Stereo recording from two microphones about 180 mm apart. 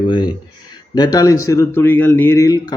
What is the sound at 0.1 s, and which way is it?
A man's voice, 25° left (ahead or behind).